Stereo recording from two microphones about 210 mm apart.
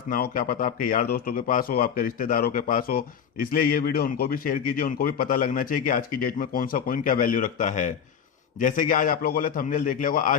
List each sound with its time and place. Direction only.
0.1 s a man's voice: 40° left (ahead or behind)